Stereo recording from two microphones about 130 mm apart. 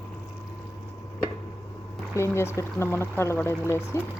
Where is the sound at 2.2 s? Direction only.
20° left (ahead or behind).